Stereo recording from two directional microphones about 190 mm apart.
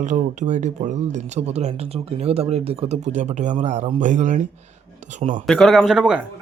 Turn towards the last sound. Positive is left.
turn(degrees=-5)  # may be behind; listen again after turning